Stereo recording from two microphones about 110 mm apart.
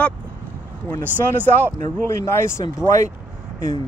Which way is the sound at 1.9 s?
25° left (ahead or behind).